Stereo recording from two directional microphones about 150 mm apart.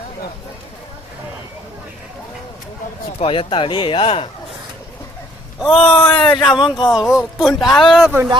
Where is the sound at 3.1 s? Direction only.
35° left (ahead or behind).